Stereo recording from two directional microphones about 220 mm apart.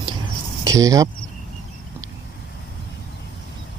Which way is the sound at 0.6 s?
15° right (ahead or behind).